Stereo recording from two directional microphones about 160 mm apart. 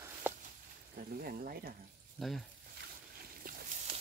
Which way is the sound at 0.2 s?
10° right (ahead or behind).